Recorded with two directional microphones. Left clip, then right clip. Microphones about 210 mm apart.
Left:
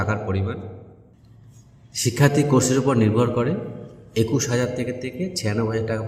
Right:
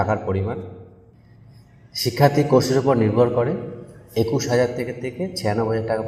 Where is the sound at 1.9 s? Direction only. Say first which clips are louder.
Right 2 dB; 35° left (ahead or behind).